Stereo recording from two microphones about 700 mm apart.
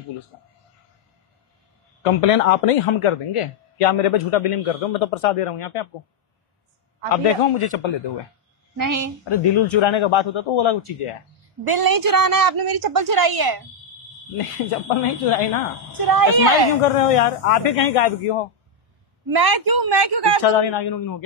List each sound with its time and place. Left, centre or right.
2.0 s speech: left
7.1 s speech: left
8.7 s a woman's voice: right
9.3 s a man's voice: left
11.6 s a woman's voice: right
15.0 s speech: left
16.0 s a woman's voice: right
16.8 s speech: left
19.3 s a man's voice: right
20.4 s a man's voice: left